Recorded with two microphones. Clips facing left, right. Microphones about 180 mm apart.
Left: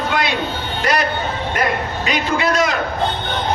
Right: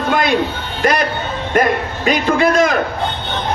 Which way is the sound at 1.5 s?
50° right (ahead or behind).